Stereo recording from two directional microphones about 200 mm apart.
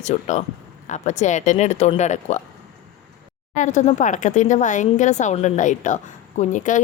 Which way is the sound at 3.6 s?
35° left (ahead or behind).